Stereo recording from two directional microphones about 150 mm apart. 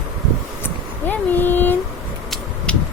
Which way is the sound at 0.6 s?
15° left (ahead or behind).